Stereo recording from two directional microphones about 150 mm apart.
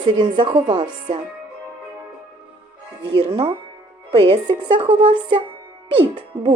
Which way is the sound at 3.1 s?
40° right (ahead or behind).